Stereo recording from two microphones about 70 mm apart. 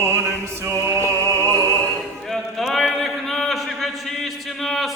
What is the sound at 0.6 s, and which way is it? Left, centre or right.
Music, right.